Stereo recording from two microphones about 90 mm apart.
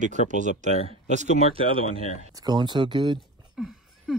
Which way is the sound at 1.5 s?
90° right.